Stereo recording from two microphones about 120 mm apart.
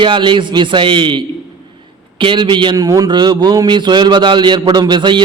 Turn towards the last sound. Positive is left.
turn(degrees=-40)  # may be behind; listen again after turning